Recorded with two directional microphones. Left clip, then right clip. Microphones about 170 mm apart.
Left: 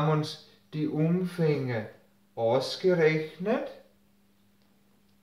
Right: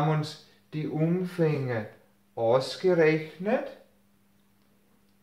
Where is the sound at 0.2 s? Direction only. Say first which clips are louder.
Left 2 dB; 30° right (ahead or behind).